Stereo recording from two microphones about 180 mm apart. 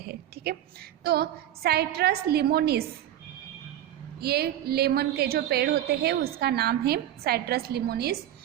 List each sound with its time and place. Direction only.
0.0 s a woman's voice: 60° right (ahead or behind)
4.2 s a woman's voice: 60° right (ahead or behind)